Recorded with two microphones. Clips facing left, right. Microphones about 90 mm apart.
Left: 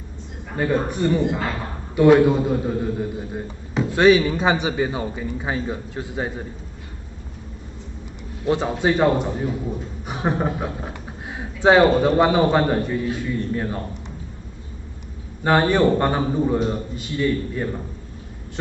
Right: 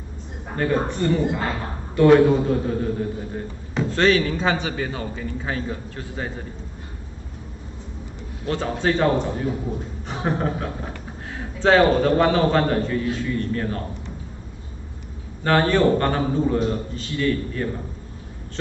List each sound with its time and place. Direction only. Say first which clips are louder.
0.6 s a man's voice: left 1 dB; 10° left (ahead or behind)
8.5 s a man's voice: left 3 dB; 15° left (ahead or behind)
15.4 s a man's voice: left 1 dB; 15° left (ahead or behind)